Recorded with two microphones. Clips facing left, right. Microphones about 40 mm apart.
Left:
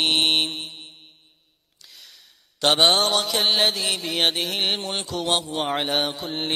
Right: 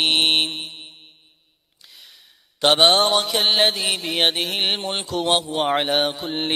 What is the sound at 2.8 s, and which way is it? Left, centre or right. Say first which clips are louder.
Mantra: right 3 dB; centre.